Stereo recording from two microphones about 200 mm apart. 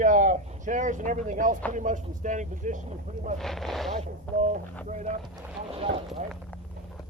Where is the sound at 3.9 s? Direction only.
35° right (ahead or behind).